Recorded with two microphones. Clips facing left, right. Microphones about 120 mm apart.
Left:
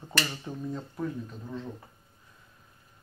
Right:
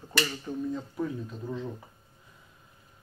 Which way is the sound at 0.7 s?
Centre (ahead or behind).